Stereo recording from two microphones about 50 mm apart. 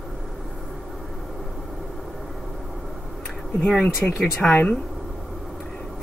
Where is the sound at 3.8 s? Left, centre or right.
Centre.